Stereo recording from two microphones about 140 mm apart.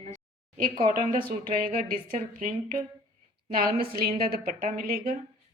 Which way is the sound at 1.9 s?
70° right (ahead or behind).